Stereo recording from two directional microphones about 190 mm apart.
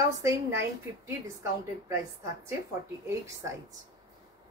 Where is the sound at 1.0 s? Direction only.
15° right (ahead or behind).